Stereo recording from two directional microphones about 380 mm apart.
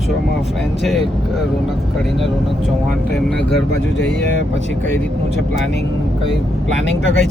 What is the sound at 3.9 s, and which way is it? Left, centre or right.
Speech, left.